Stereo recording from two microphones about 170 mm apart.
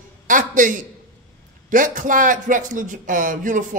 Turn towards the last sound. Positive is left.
turn(degrees=-50)  # may be behind; listen again after turning